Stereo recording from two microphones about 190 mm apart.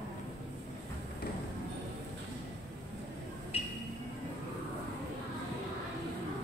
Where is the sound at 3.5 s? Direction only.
30° left (ahead or behind).